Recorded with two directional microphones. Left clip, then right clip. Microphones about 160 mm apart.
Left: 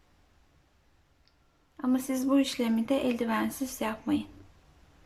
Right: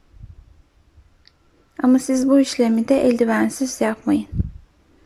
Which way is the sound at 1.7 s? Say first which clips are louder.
Right 12 dB; 35° right (ahead or behind).